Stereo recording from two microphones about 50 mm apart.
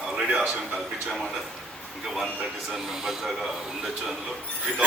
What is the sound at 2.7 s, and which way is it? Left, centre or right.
Speech, centre.